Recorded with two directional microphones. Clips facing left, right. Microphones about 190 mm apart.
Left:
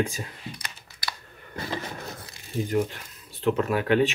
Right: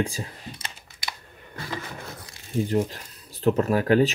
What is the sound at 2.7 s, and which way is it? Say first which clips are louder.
Speech: right 1 dB; 30° right (ahead or behind).